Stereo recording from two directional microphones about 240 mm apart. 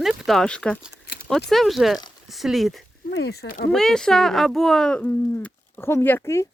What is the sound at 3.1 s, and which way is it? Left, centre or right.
Speech, left.